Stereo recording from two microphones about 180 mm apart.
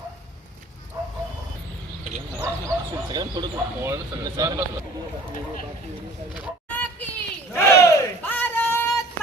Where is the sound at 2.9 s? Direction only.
20° right (ahead or behind).